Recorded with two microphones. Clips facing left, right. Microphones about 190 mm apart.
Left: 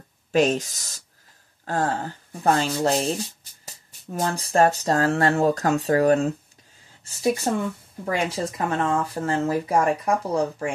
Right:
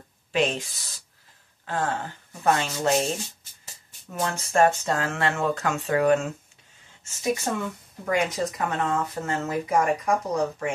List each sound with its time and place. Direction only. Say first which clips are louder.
0.3 s speech: left 5 dB; 40° left (ahead or behind)